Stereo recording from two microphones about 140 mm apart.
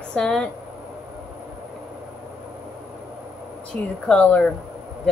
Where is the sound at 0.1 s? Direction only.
5° left (ahead or behind).